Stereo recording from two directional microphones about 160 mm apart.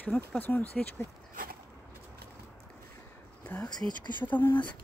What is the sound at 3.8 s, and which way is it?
Speech, 10° left (ahead or behind).